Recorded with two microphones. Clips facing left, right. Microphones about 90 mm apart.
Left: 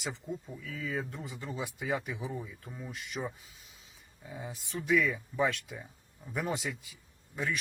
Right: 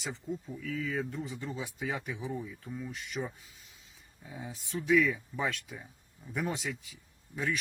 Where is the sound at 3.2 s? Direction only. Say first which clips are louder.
Even; 10° left (ahead or behind).